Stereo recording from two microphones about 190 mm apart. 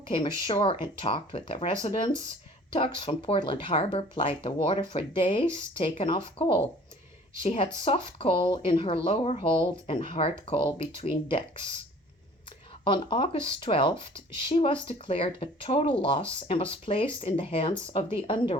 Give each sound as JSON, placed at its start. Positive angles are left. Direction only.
{"t": 0.1, "sound": "speech", "side_deg": 25}
{"t": 12.8, "sound": "speech", "side_deg": 25}